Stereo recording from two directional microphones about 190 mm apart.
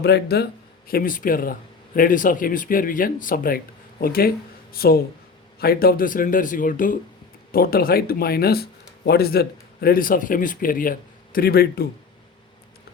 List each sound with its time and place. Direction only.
0.0 s a man's voice: 55° left (ahead or behind)